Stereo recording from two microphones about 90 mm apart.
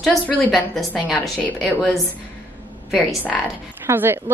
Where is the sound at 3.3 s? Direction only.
Centre (ahead or behind).